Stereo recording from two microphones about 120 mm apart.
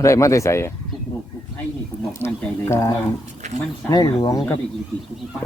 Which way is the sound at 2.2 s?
20° left (ahead or behind).